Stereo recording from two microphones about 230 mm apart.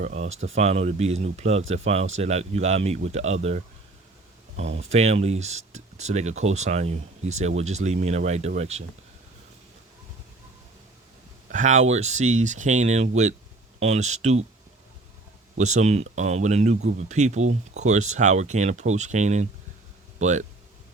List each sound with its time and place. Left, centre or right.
0.0 s speech: right
4.9 s speech: right
11.5 s speech: right
15.5 s speech: right